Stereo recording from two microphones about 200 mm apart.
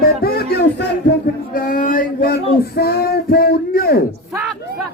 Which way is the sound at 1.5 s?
45° left (ahead or behind).